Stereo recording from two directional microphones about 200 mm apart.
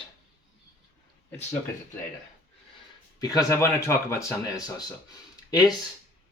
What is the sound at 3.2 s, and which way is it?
Speech, 20° left (ahead or behind).